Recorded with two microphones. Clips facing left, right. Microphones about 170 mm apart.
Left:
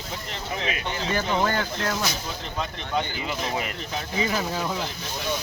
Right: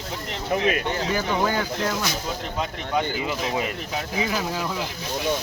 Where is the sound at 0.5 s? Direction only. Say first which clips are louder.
Right 8 dB; 55° right (ahead or behind).